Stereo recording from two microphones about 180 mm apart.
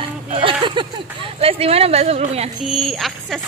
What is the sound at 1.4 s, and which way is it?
A woman's voice, 35° right (ahead or behind).